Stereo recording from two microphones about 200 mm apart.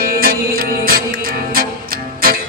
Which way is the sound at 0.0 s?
45° right (ahead or behind).